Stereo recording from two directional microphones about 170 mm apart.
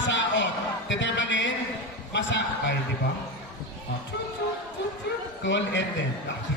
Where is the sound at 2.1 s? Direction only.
90° left.